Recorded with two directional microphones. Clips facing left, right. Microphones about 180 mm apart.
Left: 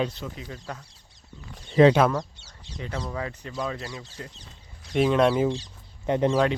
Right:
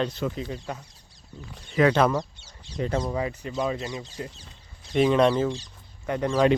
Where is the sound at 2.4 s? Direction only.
55° right (ahead or behind).